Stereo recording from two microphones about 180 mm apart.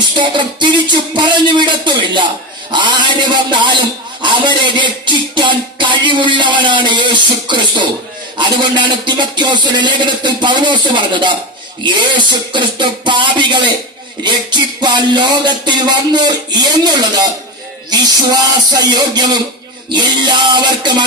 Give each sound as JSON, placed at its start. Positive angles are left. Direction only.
{"t": 0.2, "sound": "a man's voice", "side_deg": -25}